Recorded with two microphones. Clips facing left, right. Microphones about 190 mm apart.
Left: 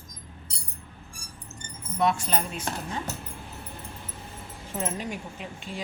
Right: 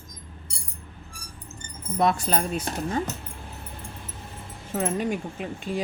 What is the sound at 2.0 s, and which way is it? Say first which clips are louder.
Speech: right 2 dB; 35° right (ahead or behind).